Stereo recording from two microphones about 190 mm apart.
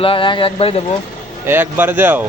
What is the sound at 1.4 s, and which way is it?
Speech, 10° right (ahead or behind).